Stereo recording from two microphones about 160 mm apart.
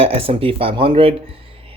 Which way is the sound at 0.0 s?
35° right (ahead or behind).